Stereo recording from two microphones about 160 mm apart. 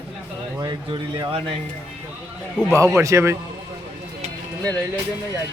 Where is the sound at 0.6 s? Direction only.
25° right (ahead or behind).